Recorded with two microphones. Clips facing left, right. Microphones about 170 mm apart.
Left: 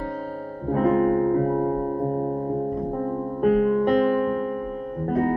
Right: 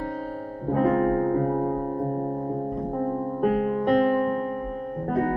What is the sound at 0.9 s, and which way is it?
Music, 50° right (ahead or behind).